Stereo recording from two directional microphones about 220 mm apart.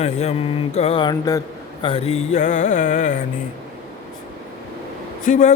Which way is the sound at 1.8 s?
25° left (ahead or behind).